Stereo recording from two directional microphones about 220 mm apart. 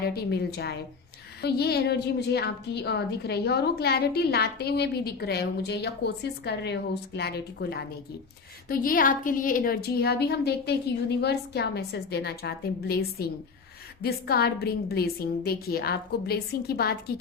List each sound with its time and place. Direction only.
0.0 s a woman's voice: 45° left (ahead or behind)